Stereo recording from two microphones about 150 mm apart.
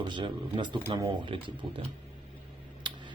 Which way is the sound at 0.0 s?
30° right (ahead or behind).